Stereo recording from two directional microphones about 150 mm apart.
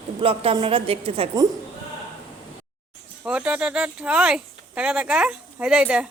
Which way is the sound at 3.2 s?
10° right (ahead or behind).